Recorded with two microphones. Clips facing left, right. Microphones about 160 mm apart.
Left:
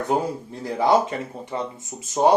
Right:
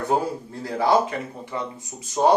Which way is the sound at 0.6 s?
20° left (ahead or behind).